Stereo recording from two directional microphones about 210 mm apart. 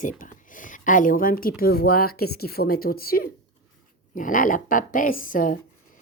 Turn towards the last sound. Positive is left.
turn(degrees=40)  # may be behind; listen again after turning